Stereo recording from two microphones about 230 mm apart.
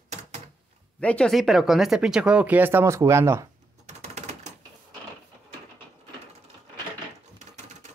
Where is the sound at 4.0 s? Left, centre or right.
Right.